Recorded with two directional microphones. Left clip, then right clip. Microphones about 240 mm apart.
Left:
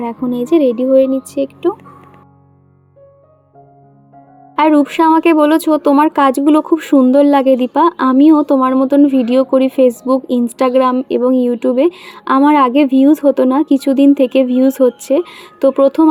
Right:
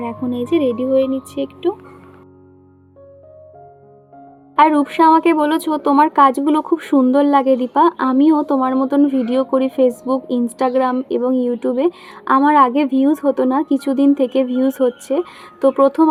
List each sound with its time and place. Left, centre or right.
0.0 s speech: left
4.5 s speech: left